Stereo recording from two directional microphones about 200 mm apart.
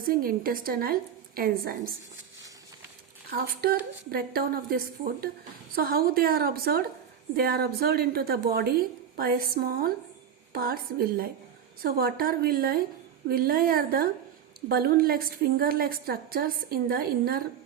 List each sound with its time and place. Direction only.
0.0 s a woman's voice: 45° right (ahead or behind)
3.2 s a woman's voice: 45° right (ahead or behind)